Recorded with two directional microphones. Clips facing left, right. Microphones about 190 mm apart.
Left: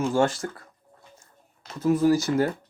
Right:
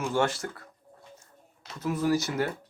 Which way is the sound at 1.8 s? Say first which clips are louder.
Left 6 dB; 40° left (ahead or behind).